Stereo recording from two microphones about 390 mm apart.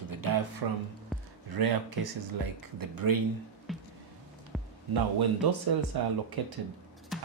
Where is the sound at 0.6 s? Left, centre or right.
Right.